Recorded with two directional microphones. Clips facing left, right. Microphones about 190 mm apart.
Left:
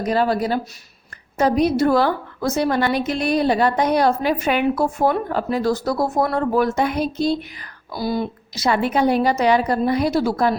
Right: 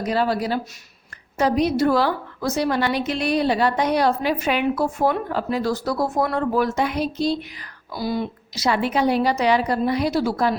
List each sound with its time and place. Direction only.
0.0 s a woman's voice: 45° left (ahead or behind)
7.9 s a woman's voice: 40° left (ahead or behind)